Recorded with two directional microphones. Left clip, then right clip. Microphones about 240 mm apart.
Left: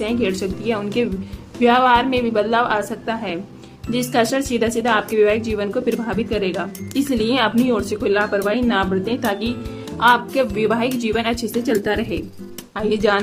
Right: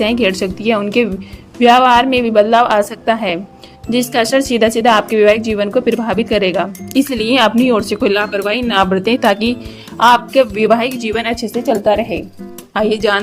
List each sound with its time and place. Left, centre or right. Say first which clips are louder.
0.0 s speech: right 7 dB; right
11.7 s a woman's voice: right 8 dB; centre
12.7 s speech: right 4 dB; right